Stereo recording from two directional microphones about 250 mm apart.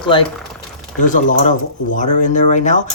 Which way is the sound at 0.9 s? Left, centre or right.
Left.